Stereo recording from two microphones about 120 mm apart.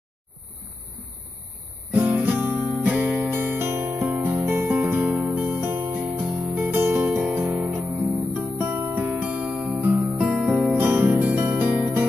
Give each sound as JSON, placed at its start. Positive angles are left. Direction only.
{"t": 1.9, "sound": "guitar", "side_deg": -15}
{"t": 2.5, "sound": "guitar", "side_deg": -25}
{"t": 2.8, "sound": "music", "side_deg": -15}
{"t": 7.8, "sound": "guitar", "side_deg": 0}
{"t": 8.4, "sound": "music", "side_deg": -15}
{"t": 10.8, "sound": "music", "side_deg": -15}